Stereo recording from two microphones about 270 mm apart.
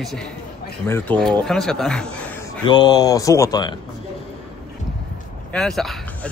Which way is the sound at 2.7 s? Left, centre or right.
Centre.